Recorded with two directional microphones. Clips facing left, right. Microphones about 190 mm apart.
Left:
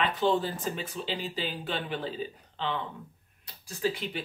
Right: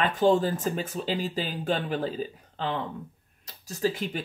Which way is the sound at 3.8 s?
45° right (ahead or behind).